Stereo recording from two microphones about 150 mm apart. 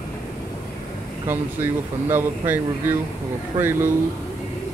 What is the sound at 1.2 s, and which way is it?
Speech, 15° right (ahead or behind).